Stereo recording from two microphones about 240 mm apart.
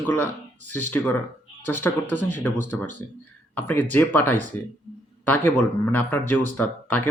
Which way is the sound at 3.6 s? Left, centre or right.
Centre.